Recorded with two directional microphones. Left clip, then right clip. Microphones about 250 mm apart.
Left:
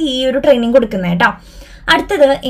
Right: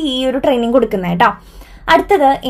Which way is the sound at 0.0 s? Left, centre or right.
Centre.